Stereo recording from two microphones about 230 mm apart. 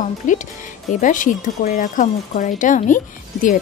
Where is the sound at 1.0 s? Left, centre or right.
Left.